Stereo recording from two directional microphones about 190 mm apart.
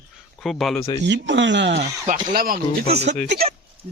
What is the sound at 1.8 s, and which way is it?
Speech, 40° right (ahead or behind).